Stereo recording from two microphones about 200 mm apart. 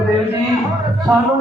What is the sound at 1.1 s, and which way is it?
Speech, 15° right (ahead or behind).